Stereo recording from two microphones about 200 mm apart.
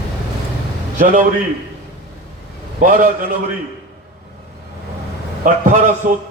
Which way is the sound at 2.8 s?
40° right (ahead or behind).